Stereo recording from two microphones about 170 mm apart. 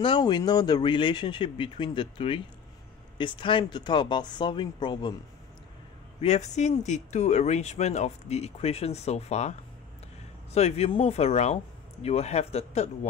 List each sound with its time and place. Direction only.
0.0 s speech: 25° left (ahead or behind)
6.2 s speech: 40° left (ahead or behind)